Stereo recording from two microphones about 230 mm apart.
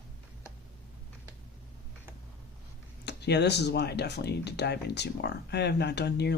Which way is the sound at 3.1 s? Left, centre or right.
Left.